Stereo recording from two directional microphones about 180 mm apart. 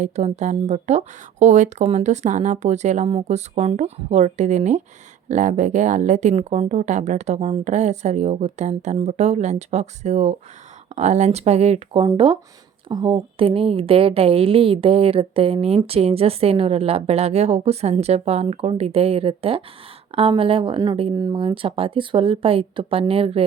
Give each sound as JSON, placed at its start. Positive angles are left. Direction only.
{"t": 0.0, "sound": "speech", "side_deg": -40}